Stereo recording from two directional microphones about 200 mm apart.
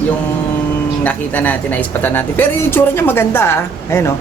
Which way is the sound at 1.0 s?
10° left (ahead or behind).